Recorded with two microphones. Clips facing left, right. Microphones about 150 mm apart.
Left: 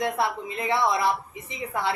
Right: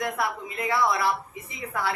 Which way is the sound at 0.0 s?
25° left (ahead or behind).